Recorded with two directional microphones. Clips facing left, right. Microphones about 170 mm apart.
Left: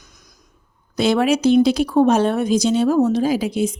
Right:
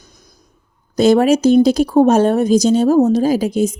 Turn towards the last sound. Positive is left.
turn(degrees=-45)  # may be behind; listen again after turning